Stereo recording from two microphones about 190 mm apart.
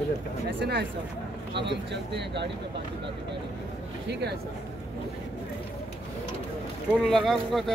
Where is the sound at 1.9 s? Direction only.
65° right (ahead or behind).